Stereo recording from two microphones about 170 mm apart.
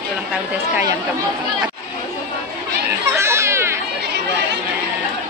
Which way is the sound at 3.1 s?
15° right (ahead or behind).